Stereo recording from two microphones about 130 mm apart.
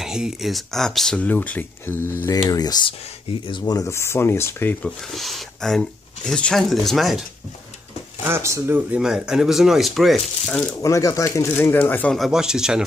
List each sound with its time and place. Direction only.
0.0 s speech: 5° right (ahead or behind); by 2.1 s 15° left (ahead or behind)
2.2 s speech: 30° left (ahead or behind)
3.8 s speech: 20° left (ahead or behind)
4.8 s speech: centre (ahead or behind)
8.2 s speech: 20° right (ahead or behind); by 10.8 s 10° left (ahead or behind)
10.8 s speech: 25° left (ahead or behind)
12.1 s speech: centre (ahead or behind)